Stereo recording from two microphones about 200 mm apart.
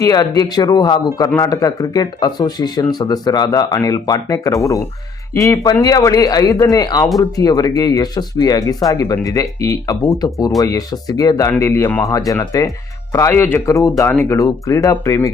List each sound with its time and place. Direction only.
0.0 s speech: 20° left (ahead or behind)